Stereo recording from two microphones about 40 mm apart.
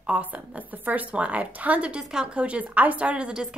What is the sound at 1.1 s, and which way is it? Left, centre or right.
A woman's voice, right.